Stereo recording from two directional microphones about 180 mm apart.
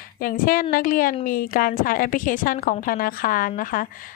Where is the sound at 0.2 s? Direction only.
50° left (ahead or behind).